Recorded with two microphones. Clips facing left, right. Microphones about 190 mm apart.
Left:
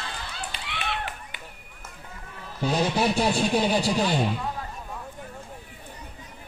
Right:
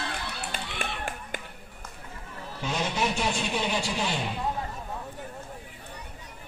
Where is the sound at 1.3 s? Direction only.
45° right (ahead or behind).